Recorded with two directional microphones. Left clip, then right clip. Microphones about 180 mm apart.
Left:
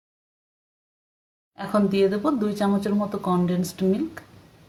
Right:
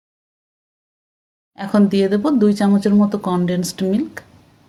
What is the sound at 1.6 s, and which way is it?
Speech, 25° right (ahead or behind).